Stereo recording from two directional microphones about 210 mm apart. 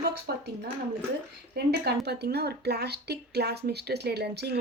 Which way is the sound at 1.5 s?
50° right (ahead or behind).